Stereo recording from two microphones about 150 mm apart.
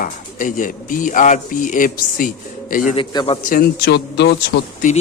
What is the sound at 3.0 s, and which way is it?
Speech, 35° left (ahead or behind).